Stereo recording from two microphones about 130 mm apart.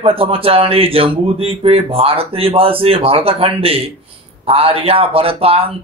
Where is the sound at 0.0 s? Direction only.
45° right (ahead or behind).